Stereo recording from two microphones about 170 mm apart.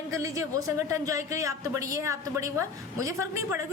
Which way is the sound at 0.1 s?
20° right (ahead or behind).